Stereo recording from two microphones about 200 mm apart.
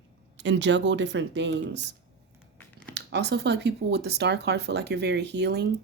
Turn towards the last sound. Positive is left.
turn(degrees=-60)  # may be behind; listen again after turning